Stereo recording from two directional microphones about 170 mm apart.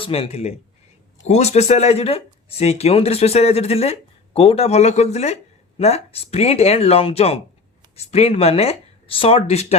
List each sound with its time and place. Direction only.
0.0 s speech: 35° left (ahead or behind)